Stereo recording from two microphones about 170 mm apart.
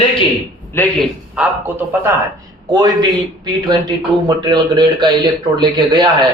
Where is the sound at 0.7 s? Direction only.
10° left (ahead or behind).